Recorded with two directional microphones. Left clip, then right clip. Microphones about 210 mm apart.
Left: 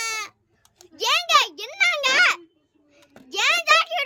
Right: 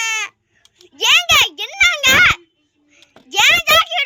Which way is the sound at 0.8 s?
5° left (ahead or behind).